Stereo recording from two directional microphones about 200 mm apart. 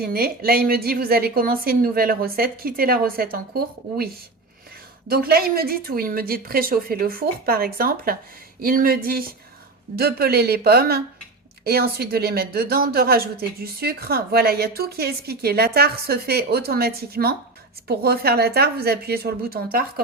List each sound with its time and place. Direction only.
0.0 s speech: 50° right (ahead or behind)